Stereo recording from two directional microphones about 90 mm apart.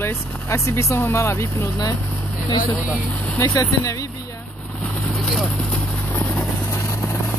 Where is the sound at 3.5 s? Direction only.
40° left (ahead or behind).